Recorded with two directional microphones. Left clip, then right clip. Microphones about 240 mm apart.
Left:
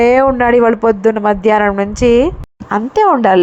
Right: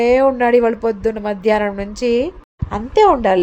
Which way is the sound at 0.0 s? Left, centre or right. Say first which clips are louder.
Left 3 dB; centre.